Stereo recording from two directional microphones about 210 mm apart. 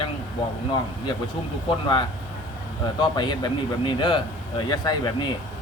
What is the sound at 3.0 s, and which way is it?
Speech, 20° left (ahead or behind).